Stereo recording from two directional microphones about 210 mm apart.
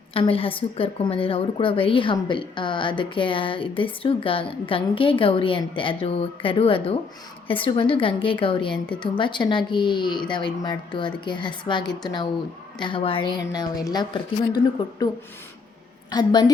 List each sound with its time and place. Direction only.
0.1 s a woman's voice: 25° left (ahead or behind)
16.1 s a woman's voice: 20° left (ahead or behind)